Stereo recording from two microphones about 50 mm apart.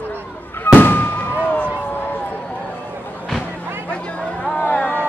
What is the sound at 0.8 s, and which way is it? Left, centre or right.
Fireworks, left.